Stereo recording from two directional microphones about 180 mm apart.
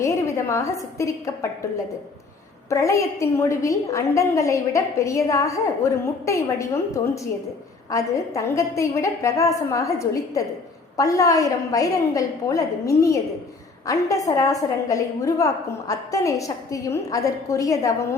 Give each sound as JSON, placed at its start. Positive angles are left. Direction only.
{"t": 0.0, "sound": "a sound", "side_deg": 15}
{"t": 0.9, "sound": "a woman's voice", "side_deg": 15}
{"t": 2.6, "sound": "a woman's voice", "side_deg": 15}